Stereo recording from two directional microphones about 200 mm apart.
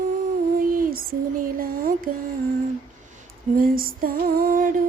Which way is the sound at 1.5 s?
45° right (ahead or behind).